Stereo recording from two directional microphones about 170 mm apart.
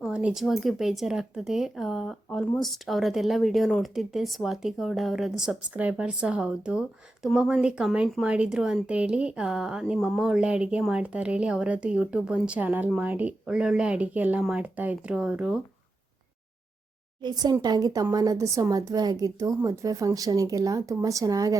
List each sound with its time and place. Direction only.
0.0 s speech: 5° right (ahead or behind)
17.2 s speech: 25° right (ahead or behind)